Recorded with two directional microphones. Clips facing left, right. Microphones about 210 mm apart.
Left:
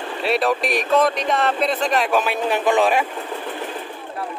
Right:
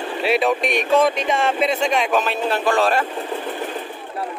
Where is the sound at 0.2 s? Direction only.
Centre (ahead or behind).